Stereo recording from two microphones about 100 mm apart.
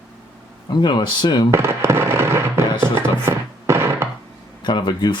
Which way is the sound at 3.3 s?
25° right (ahead or behind).